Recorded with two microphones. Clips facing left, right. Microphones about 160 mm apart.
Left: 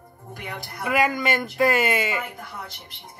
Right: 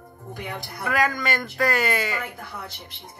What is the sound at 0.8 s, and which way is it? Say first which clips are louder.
Speech: left 2 dB; 10° left (ahead or behind).